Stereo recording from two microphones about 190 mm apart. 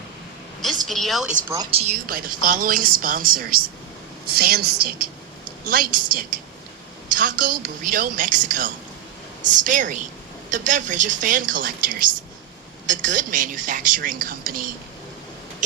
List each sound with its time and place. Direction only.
0.6 s a sound: centre (ahead or behind)
1.7 s speech: 35° right (ahead or behind)
2.0 s a woman's voice: 45° right (ahead or behind)